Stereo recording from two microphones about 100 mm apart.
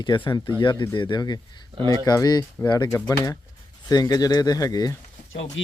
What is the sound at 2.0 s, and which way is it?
A man's voice, 40° left (ahead or behind).